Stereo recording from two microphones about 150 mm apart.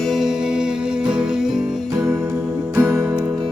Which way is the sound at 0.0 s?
Centre (ahead or behind).